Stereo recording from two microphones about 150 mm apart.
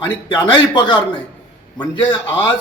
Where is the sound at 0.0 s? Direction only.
30° left (ahead or behind).